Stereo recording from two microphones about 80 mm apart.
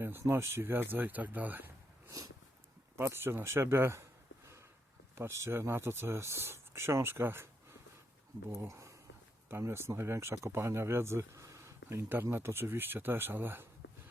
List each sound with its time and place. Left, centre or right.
0.0 s speech: right
3.0 s speech: right
5.1 s speech: right
8.6 s speech: right
9.5 s speech: right